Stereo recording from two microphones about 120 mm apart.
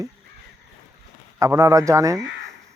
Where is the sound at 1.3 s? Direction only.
25° right (ahead or behind).